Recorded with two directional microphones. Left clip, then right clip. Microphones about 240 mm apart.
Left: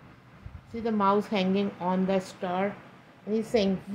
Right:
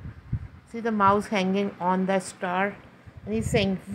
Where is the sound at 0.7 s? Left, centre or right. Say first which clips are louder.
Right 4 dB; centre.